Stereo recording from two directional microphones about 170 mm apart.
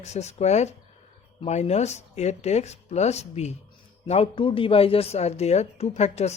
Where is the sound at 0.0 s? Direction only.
40° left (ahead or behind).